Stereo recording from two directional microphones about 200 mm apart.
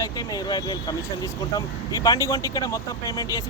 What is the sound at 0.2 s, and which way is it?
Speech, 20° left (ahead or behind).